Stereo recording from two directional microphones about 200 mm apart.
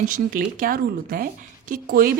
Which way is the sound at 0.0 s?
45° right (ahead or behind).